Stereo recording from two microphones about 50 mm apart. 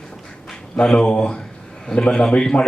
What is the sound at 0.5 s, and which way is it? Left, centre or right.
A man's voice, centre.